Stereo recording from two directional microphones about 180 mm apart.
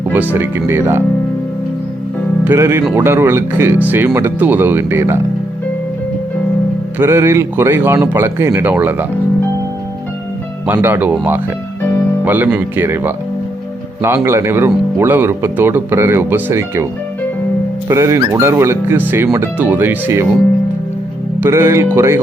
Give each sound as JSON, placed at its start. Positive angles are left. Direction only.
{"t": 0.3, "sound": "speech", "side_deg": -15}
{"t": 2.4, "sound": "speech", "side_deg": -10}
{"t": 7.0, "sound": "speech", "side_deg": -15}
{"t": 10.7, "sound": "speech", "side_deg": -10}
{"t": 17.8, "sound": "speech", "side_deg": -15}
{"t": 21.4, "sound": "speech", "side_deg": -15}